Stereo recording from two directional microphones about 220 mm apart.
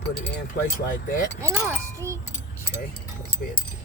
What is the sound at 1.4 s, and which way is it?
Speech, 10° right (ahead or behind).